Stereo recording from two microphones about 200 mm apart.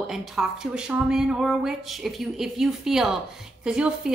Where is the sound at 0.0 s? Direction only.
Centre (ahead or behind).